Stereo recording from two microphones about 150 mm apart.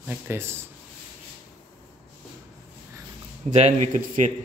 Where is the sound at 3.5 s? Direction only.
50° right (ahead or behind).